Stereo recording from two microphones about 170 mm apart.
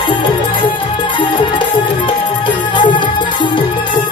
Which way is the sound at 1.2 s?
30° left (ahead or behind).